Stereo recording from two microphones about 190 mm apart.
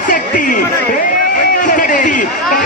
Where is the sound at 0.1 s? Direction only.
45° left (ahead or behind).